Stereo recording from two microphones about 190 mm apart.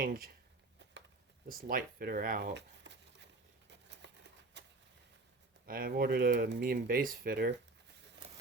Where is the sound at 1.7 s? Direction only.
50° right (ahead or behind).